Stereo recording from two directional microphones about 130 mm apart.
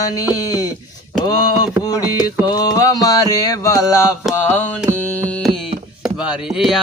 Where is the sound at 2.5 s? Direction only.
30° left (ahead or behind).